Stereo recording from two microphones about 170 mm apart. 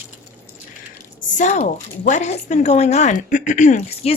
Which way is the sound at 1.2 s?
45° left (ahead or behind).